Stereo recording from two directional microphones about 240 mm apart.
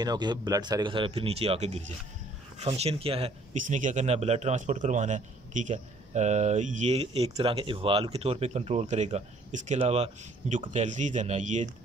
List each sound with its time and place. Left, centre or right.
0.0 s speech: centre